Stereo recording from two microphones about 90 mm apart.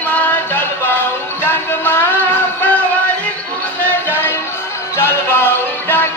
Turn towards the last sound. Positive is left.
turn(degrees=25)  # may be behind; listen again after turning